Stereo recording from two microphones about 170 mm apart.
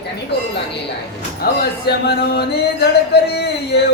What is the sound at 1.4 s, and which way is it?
Speech, 65° left (ahead or behind).